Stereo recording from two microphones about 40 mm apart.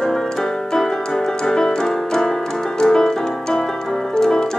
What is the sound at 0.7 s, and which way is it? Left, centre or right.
Music, centre.